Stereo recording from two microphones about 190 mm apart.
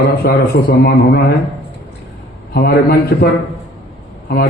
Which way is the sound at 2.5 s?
55° left (ahead or behind).